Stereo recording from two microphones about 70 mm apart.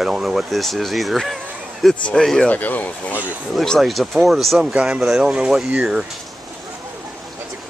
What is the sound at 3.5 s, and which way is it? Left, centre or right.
Speech, centre.